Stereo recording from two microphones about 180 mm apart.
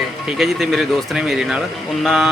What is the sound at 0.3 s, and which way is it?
Speech, centre (ahead or behind).